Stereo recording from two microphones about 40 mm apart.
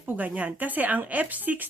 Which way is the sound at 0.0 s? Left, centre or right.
Right.